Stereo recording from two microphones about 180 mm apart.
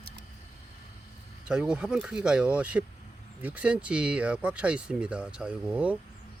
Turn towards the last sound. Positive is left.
turn(degrees=-10)  # may be behind; listen again after turning